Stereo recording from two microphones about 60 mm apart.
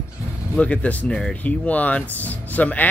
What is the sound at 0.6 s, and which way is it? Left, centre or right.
Speech, left.